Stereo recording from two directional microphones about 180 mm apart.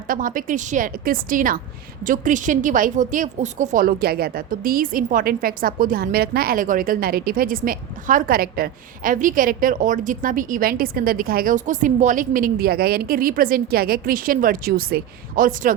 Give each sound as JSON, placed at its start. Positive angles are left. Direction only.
{"t": 0.1, "sound": "a woman's voice", "side_deg": -50}